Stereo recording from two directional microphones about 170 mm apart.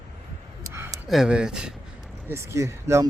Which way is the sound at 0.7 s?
15° right (ahead or behind).